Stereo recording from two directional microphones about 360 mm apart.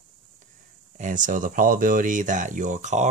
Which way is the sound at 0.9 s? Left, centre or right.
Right.